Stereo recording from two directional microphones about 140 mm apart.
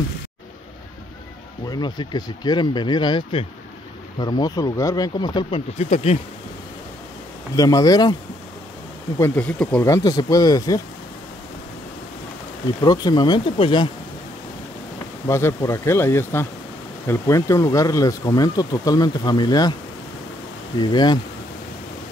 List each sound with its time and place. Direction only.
1.7 s speech: 30° left (ahead or behind)
5.8 s speech: 50° left (ahead or behind)
7.5 s speech: 25° left (ahead or behind)
9.2 s speech: 10° left (ahead or behind)
9.8 s speech: 25° left (ahead or behind)
12.8 s speech: 30° left (ahead or behind)
15.2 s speech: 20° left (ahead or behind)
20.8 s speech: 30° left (ahead or behind)